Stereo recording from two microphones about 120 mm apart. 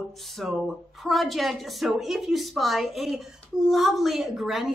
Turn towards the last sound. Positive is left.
turn(degrees=-5)  # may be behind; listen again after turning